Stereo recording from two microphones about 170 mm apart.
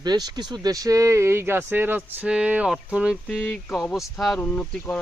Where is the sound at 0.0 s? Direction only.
25° right (ahead or behind).